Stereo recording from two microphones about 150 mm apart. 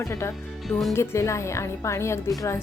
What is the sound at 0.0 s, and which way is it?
Speech, 20° left (ahead or behind).